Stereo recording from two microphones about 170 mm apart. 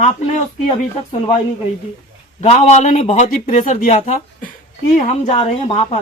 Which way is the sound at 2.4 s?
40° left (ahead or behind).